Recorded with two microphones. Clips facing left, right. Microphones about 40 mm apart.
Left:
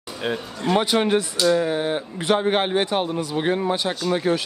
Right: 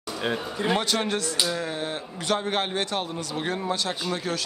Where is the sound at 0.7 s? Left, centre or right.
Centre.